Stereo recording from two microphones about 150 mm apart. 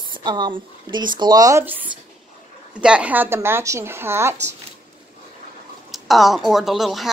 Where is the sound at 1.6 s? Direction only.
10° right (ahead or behind).